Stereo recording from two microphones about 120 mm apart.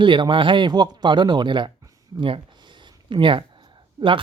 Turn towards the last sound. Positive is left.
turn(degrees=-45)  # may be behind; listen again after turning